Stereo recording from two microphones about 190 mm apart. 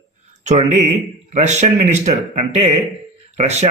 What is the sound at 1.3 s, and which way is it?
A man's voice, 40° right (ahead or behind).